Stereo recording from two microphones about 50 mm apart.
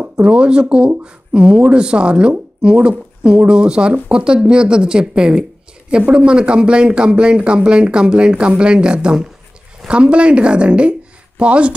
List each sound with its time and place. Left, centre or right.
0.2 s a man's voice: right